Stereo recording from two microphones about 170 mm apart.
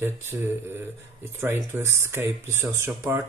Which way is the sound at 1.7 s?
15° right (ahead or behind).